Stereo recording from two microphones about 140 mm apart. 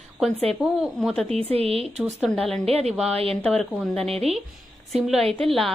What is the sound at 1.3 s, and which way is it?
Speech, 45° right (ahead or behind).